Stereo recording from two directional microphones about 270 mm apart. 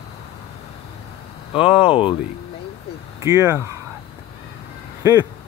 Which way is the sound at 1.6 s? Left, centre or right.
Centre.